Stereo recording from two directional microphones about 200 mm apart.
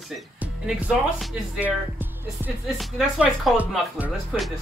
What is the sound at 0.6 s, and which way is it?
Speech, 5° right (ahead or behind).